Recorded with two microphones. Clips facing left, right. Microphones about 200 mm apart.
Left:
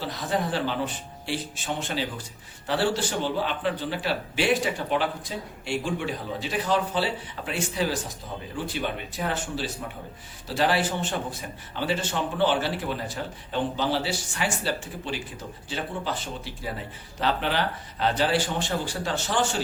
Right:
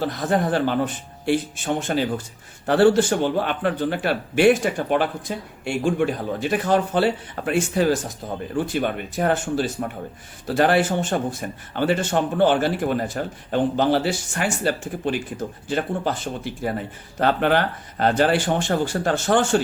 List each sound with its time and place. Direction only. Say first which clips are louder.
0.0 s speech: right 6 dB; 50° right (ahead or behind)